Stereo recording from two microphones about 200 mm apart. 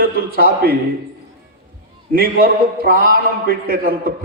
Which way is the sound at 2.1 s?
50° right (ahead or behind).